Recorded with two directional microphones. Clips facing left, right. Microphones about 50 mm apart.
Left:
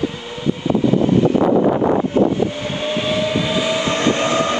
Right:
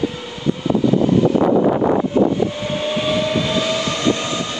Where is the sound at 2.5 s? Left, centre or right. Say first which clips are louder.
Right 1 dB; centre.